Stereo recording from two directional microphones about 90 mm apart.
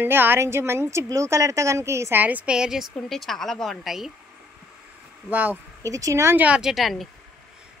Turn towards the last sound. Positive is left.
turn(degrees=0)  # may be behind; listen again after turning